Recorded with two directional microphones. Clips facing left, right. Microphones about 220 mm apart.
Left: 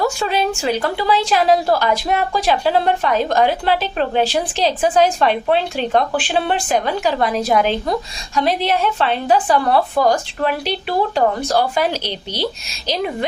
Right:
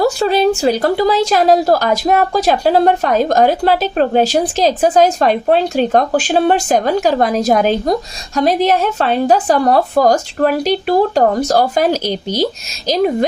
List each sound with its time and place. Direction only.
0.0 s a woman's voice: 35° right (ahead or behind)